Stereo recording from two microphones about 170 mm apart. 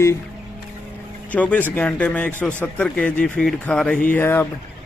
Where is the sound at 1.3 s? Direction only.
10° left (ahead or behind).